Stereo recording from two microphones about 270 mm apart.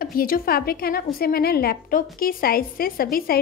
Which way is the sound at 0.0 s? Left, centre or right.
Left.